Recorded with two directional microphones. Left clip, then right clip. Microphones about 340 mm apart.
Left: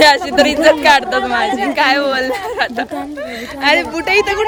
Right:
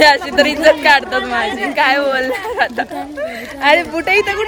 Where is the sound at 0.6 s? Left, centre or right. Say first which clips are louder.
Even; centre.